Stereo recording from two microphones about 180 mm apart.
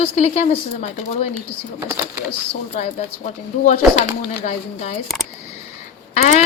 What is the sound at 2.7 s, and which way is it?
Speech, 40° left (ahead or behind).